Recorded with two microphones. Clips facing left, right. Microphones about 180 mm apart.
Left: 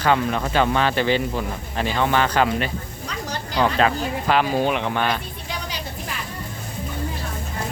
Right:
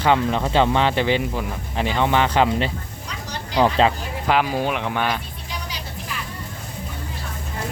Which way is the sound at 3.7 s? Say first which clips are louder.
Right 1 dB; 25° right (ahead or behind).